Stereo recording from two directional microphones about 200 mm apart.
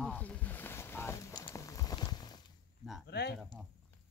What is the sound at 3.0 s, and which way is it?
Speech, 55° left (ahead or behind).